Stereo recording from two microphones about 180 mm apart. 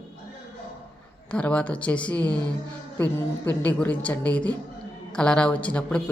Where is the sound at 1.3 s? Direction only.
5° left (ahead or behind).